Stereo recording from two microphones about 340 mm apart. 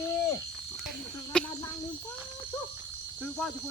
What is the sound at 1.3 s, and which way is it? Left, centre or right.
Speech, centre.